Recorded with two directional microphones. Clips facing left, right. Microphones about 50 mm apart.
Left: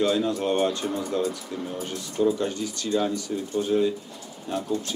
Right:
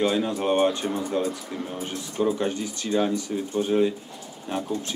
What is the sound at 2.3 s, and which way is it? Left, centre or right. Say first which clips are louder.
Speech: right 1 dB; right.